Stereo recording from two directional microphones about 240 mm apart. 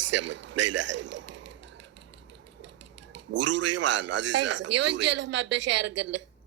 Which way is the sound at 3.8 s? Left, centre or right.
Right.